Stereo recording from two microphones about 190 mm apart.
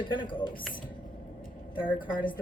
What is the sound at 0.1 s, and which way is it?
Speech, 25° left (ahead or behind).